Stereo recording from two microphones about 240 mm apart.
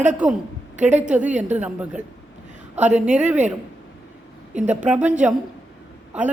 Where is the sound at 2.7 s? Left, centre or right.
Right.